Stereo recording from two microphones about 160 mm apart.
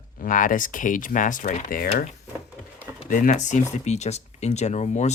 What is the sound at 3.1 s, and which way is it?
Speech, 50° left (ahead or behind).